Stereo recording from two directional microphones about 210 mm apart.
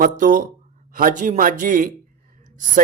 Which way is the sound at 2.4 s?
40° right (ahead or behind).